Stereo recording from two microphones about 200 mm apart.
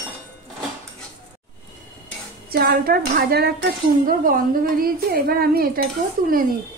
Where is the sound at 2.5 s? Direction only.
50° right (ahead or behind).